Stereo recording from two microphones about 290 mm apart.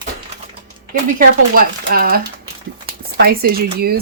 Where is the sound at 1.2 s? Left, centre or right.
Right.